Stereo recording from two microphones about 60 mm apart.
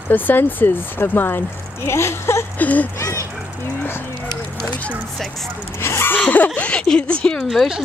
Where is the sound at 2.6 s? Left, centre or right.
Left.